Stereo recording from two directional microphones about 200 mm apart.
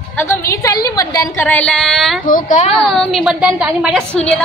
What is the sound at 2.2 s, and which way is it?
Speech, 40° left (ahead or behind).